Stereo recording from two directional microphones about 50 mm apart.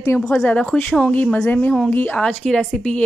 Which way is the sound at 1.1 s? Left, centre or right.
Left.